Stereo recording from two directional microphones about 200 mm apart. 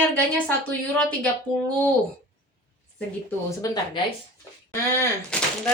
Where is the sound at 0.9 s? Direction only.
5° left (ahead or behind).